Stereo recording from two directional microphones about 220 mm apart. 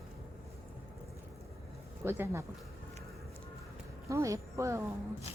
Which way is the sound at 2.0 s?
10° right (ahead or behind).